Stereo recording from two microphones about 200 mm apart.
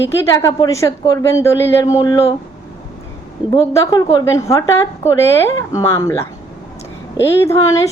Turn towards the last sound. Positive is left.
turn(degrees=15)  # may be behind; listen again after turning